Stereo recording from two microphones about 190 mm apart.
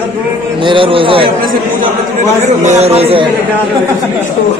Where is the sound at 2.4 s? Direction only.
35° right (ahead or behind).